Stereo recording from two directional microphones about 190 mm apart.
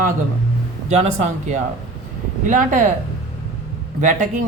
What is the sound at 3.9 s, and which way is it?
Speech, 40° right (ahead or behind).